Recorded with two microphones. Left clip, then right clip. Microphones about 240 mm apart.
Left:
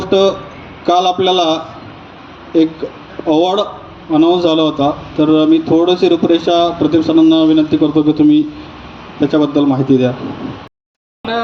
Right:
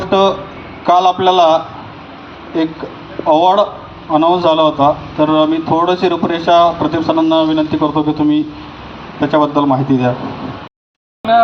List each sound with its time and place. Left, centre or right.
0.0 s a man's voice: left
3.2 s a man's voice: left
11.2 s a sound: left